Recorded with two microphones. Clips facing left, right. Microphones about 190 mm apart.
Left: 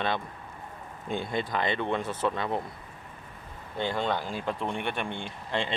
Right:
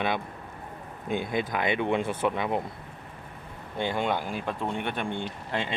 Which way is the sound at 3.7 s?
15° right (ahead or behind).